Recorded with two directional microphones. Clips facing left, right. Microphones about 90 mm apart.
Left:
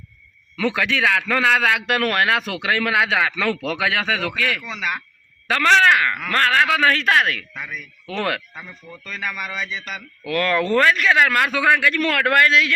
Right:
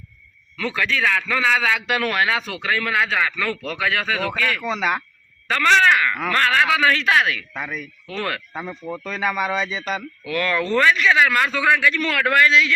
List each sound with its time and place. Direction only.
0.6 s a man's voice: 75° left (ahead or behind); by 2.2 s 55° left (ahead or behind)
2.3 s speech: centre (ahead or behind)
2.6 s speech: 70° left (ahead or behind)
4.3 s speech: centre (ahead or behind)
5.5 s a man's voice: 60° left (ahead or behind)
7.5 s speech: 35° right (ahead or behind)
8.0 s speech: 70° left (ahead or behind)
8.8 s speech: 40° right (ahead or behind)
10.2 s a man's voice: 55° left (ahead or behind)